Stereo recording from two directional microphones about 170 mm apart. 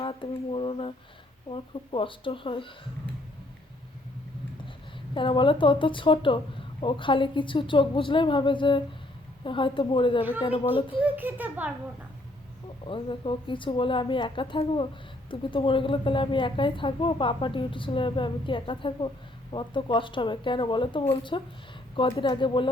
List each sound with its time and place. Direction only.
0.0 s a sound: 30° left (ahead or behind)
1.5 s speech: 30° left (ahead or behind)
5.1 s a woman's voice: 30° left (ahead or behind)
11.0 s a child's voice: 10° right (ahead or behind)
12.9 s a woman's voice: 30° left (ahead or behind)